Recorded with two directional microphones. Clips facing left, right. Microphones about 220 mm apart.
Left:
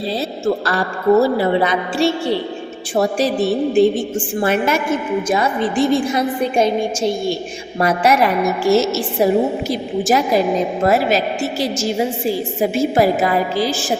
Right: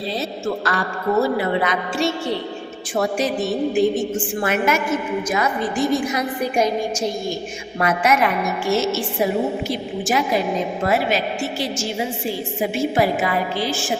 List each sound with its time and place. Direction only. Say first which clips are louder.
0.6 s a woman's voice: left 4 dB; 35° left (ahead or behind)